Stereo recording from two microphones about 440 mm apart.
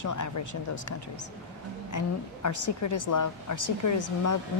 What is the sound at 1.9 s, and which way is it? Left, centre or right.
Speech, left.